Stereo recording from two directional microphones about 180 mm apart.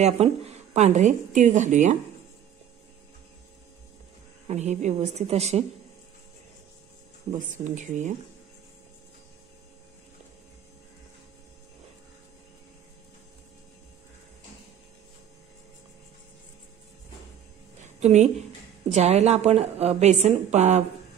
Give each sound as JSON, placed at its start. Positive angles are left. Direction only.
{"t": 0.0, "sound": "a woman's voice", "side_deg": -35}
{"t": 4.5, "sound": "a woman's voice", "side_deg": -40}
{"t": 7.3, "sound": "speech", "side_deg": -45}
{"t": 17.7, "sound": "a sound", "side_deg": -40}
{"t": 18.9, "sound": "a woman's voice", "side_deg": -40}